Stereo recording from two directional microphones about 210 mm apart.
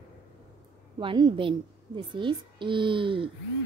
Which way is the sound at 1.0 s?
20° right (ahead or behind).